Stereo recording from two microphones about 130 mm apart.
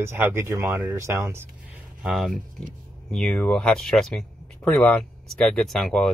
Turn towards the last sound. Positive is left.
turn(degrees=0)  # may be behind; listen again after turning